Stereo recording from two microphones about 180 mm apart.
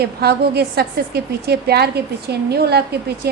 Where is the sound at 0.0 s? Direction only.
60° right (ahead or behind).